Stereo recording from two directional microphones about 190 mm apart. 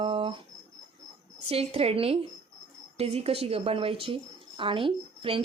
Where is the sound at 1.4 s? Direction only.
30° right (ahead or behind).